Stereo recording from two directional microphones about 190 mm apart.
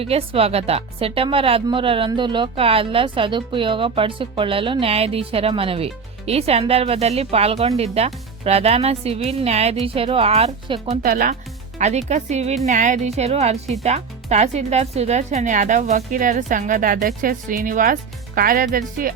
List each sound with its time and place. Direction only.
0.0 s speech: 30° right (ahead or behind)
11.0 s speech: 50° right (ahead or behind)
11.8 s speech: 35° right (ahead or behind)